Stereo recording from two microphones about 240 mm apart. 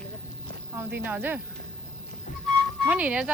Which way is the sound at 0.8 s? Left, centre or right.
Centre.